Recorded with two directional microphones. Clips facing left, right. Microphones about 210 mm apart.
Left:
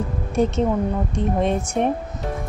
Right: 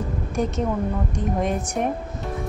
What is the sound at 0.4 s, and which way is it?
Speech, 25° left (ahead or behind).